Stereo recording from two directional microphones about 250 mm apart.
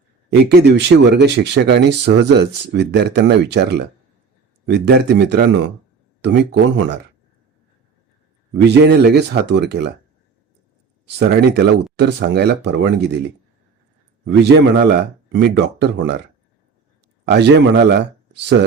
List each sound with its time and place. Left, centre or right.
0.3 s speech: right
8.5 s speech: right
11.0 s speech: right
14.3 s speech: right
17.2 s speech: right